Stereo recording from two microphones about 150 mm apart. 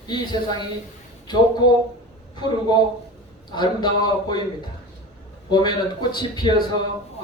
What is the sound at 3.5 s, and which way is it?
Speech, 30° left (ahead or behind).